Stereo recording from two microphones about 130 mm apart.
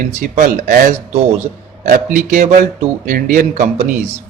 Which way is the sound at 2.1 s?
75° right (ahead or behind).